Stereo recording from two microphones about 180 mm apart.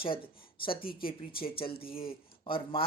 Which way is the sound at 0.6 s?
30° left (ahead or behind).